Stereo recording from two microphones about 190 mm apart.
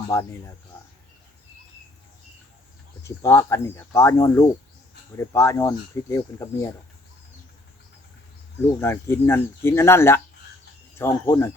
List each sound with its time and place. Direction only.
0.1 s speech: 15° left (ahead or behind)
3.0 s speech: 15° left (ahead or behind)
8.8 s speech: 15° left (ahead or behind)